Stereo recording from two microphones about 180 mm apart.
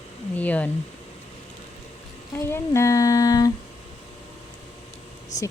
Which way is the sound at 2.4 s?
15° left (ahead or behind).